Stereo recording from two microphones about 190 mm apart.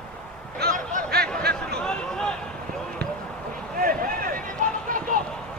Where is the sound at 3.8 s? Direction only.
45° right (ahead or behind).